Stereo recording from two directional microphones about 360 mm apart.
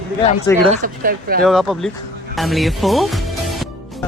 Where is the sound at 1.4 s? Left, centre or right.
Centre.